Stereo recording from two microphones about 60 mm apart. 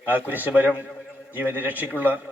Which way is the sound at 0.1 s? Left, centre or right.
Right.